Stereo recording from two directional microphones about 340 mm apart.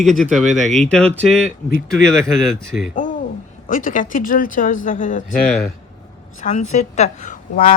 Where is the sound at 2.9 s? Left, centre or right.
Left.